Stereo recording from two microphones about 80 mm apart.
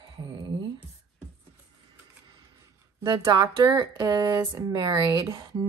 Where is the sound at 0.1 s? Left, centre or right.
Right.